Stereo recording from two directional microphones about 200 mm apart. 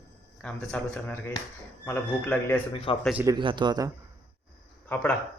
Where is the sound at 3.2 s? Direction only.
20° right (ahead or behind).